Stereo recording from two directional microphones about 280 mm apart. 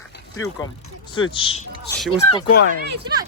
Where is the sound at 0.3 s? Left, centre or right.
Centre.